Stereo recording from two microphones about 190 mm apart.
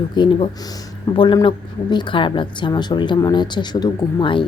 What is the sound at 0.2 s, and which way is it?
Speech, 25° left (ahead or behind).